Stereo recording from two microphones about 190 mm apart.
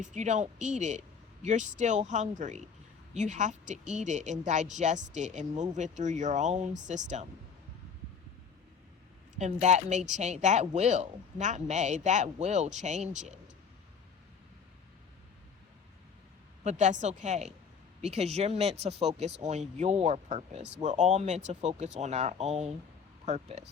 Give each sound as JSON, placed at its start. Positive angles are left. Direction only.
{"t": 0.0, "sound": "speech", "side_deg": -40}
{"t": 9.3, "sound": "speech", "side_deg": -40}
{"t": 16.6, "sound": "speech", "side_deg": -40}